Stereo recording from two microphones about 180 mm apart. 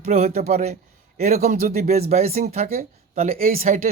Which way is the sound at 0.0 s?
40° right (ahead or behind).